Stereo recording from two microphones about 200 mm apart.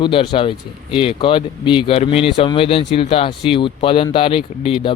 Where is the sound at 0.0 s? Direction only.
25° left (ahead or behind).